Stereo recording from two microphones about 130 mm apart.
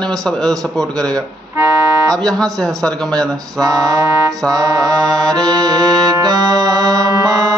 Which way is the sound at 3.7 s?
25° right (ahead or behind).